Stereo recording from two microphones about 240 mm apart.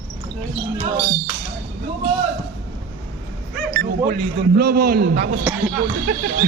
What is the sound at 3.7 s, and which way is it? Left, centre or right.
Speech, right.